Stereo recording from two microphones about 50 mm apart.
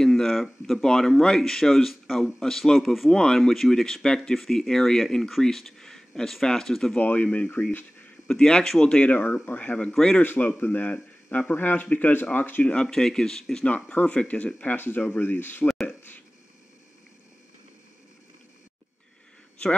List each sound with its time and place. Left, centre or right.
0.0 s speech: centre
7.0 s speech: left
8.3 s speech: centre
9.1 s speech: left
9.8 s speech: centre
10.2 s a man's voice: left
12.8 s speech: centre
13.9 s speech: left
15.2 s speech: left